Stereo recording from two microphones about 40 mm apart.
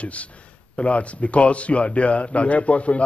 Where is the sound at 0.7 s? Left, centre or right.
Left.